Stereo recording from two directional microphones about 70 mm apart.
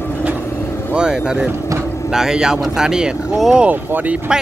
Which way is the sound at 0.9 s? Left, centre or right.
Centre.